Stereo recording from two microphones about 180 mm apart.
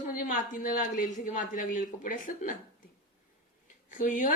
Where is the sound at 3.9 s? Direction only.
45° left (ahead or behind).